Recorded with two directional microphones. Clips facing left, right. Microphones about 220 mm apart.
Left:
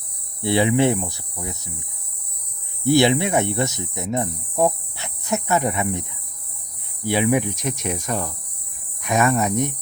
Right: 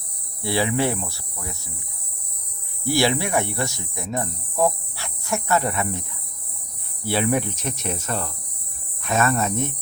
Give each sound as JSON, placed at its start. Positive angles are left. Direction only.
{"t": 0.4, "sound": "speech", "side_deg": 20}
{"t": 2.8, "sound": "speech", "side_deg": 20}